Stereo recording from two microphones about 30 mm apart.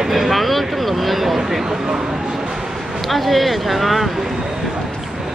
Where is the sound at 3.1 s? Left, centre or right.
Centre.